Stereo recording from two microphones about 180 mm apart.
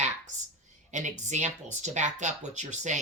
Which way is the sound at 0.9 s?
40° right (ahead or behind).